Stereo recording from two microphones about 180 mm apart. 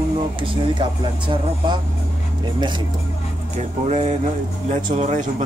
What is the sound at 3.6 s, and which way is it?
Speech, 40° right (ahead or behind).